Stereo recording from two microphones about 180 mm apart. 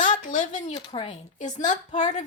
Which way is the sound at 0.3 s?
45° left (ahead or behind).